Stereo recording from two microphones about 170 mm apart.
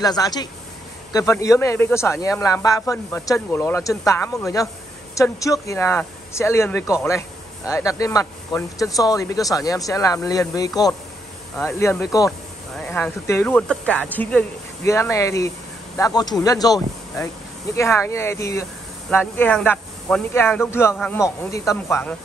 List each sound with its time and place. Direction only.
0.0 s speech: 25° left (ahead or behind)
12.3 s speech: 5° left (ahead or behind)